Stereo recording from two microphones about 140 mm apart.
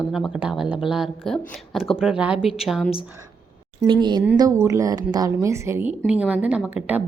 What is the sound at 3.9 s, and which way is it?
A woman's voice, 35° right (ahead or behind).